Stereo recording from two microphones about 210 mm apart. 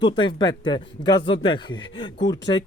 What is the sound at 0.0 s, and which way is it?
Speech, 20° left (ahead or behind).